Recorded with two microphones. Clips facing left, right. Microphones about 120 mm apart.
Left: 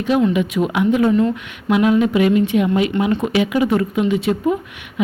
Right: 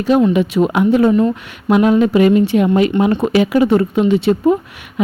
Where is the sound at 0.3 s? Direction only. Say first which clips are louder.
Right 4 dB; 35° right (ahead or behind).